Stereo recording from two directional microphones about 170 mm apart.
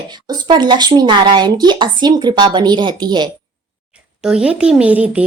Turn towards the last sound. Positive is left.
turn(degrees=-5)  # may be behind; listen again after turning